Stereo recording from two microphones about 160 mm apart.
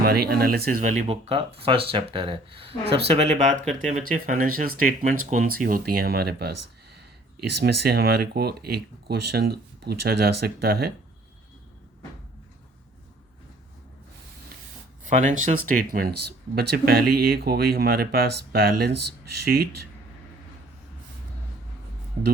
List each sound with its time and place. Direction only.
0.0 s speech: 70° right (ahead or behind)
7.6 s speech: 80° right
15.0 s speech: 55° right (ahead or behind); by 18.9 s 85° right